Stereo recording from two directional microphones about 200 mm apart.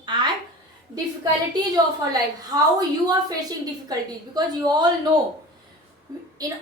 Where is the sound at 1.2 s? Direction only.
20° right (ahead or behind).